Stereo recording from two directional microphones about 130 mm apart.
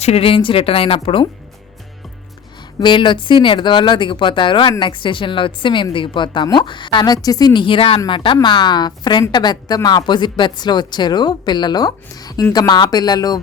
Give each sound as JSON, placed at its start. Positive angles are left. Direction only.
{"t": 0.0, "sound": "speech", "side_deg": 50}
{"t": 2.8, "sound": "a woman's voice", "side_deg": 40}